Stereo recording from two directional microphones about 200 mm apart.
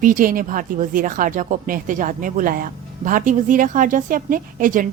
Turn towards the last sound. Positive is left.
turn(degrees=-40)  # may be behind; listen again after turning